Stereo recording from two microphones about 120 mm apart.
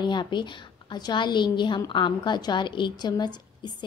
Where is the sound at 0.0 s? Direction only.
40° left (ahead or behind).